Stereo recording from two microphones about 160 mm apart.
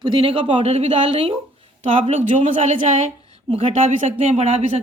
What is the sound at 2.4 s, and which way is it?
Speech, 45° right (ahead or behind).